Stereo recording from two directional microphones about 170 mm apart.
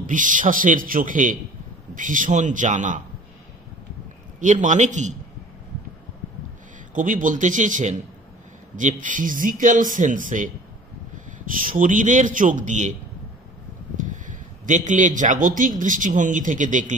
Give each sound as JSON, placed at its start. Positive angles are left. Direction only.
{"t": 0.0, "sound": "speech", "side_deg": -50}
{"t": 4.4, "sound": "speech", "side_deg": -45}
{"t": 6.9, "sound": "speech", "side_deg": -50}
{"t": 13.9, "sound": "a sound", "side_deg": -50}
{"t": 15.8, "sound": "speech", "side_deg": -50}